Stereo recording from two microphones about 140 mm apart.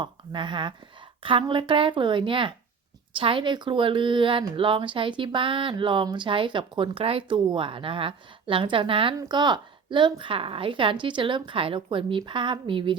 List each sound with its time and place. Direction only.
0.0 s a woman's voice: 35° right (ahead or behind)